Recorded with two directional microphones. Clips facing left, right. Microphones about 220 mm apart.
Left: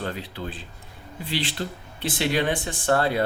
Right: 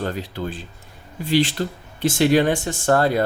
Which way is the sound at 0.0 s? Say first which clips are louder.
Right 5 dB; 45° right (ahead or behind).